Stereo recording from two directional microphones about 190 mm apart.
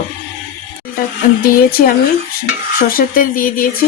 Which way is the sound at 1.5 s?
50° left (ahead or behind).